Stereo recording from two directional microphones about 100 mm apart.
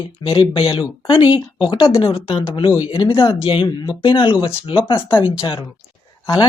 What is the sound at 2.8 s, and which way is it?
Speech, 50° left (ahead or behind).